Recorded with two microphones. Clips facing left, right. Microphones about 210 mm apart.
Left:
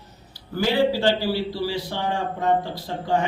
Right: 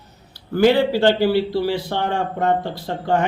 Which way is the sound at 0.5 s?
60° right (ahead or behind).